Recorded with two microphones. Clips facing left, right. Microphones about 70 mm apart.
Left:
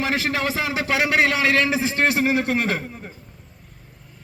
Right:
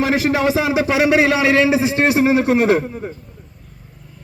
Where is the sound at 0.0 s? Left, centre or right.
Centre.